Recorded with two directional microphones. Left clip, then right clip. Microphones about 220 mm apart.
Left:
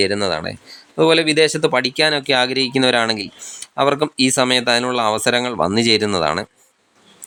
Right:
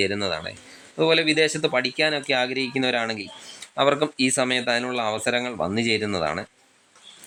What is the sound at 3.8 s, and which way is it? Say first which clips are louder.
Speech: left 4 dB; 15° left (ahead or behind).